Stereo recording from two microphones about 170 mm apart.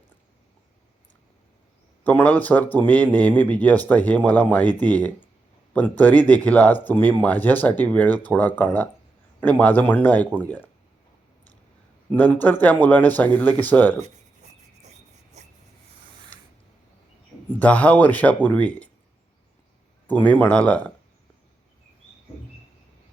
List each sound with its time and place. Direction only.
2.0 s speech: 10° left (ahead or behind)
12.1 s speech: 10° left (ahead or behind)
15.4 s a sound: 40° right (ahead or behind)
17.5 s speech: 10° left (ahead or behind)
20.1 s speech: 10° left (ahead or behind)